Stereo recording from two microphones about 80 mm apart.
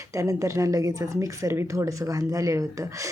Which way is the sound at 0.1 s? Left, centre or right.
Right.